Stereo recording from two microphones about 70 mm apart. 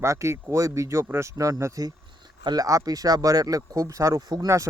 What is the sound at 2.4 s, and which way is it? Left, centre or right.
Speech, right.